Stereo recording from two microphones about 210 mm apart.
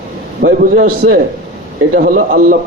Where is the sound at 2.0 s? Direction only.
40° right (ahead or behind).